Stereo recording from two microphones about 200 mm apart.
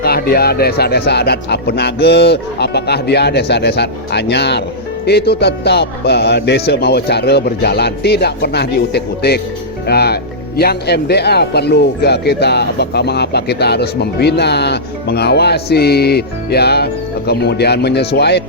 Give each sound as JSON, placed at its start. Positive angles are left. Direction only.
{"t": 0.0, "sound": "a man's voice", "side_deg": 50}